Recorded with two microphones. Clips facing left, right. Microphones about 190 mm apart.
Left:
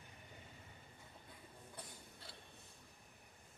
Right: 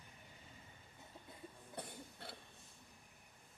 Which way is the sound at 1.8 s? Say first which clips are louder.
Right 9 dB; 60° right (ahead or behind).